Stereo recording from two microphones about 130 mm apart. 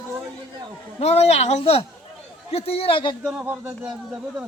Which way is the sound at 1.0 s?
55° left (ahead or behind).